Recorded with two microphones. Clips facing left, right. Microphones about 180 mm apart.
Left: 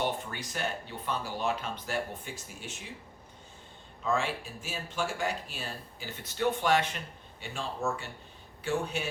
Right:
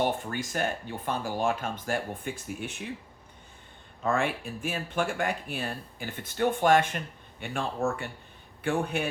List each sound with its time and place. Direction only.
0.0 s speech: 50° right (ahead or behind)
4.0 s speech: 55° right (ahead or behind)